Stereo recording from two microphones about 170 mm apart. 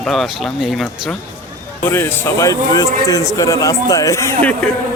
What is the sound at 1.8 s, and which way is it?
Speech, 15° left (ahead or behind).